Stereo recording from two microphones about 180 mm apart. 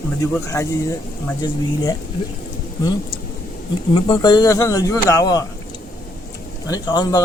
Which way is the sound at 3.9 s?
25° left (ahead or behind).